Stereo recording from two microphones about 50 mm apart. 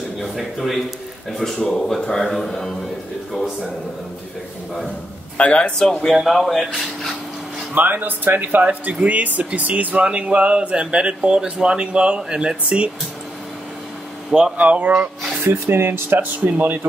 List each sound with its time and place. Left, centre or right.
0.2 s speech: centre
5.4 s speech: left
6.0 s speech: centre
7.7 s speech: right
10.0 s speech: right
14.6 s speech: right
15.4 s speech: right
16.3 s speech: right